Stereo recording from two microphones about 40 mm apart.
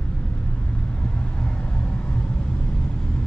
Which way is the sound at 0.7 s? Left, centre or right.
Left.